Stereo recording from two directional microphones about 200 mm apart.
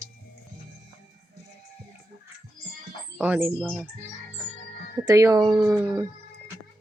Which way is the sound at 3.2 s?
10° right (ahead or behind).